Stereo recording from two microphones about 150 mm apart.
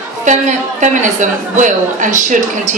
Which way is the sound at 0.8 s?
55° right (ahead or behind).